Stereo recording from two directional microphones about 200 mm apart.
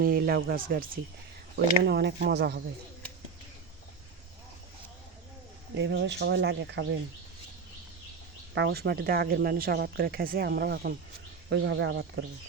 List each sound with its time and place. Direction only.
0.0 s speech: 50° right (ahead or behind)
1.5 s speech: 55° right (ahead or behind)
5.7 s speech: 60° right (ahead or behind)
8.5 s speech: 55° right (ahead or behind)